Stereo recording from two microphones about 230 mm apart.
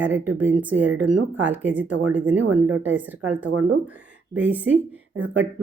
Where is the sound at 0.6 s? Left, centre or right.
Centre.